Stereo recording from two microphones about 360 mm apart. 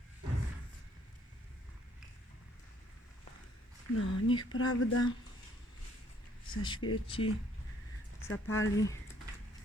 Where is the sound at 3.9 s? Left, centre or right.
Left.